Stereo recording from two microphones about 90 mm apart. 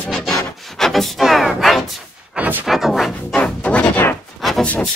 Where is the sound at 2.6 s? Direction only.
5° right (ahead or behind).